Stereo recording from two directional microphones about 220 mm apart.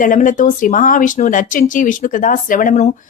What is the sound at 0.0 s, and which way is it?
Speech, 35° left (ahead or behind).